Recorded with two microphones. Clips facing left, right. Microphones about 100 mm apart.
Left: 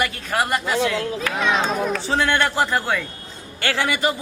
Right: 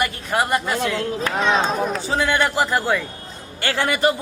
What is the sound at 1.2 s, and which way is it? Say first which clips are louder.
Speech: right 3 dB; 30° right (ahead or behind).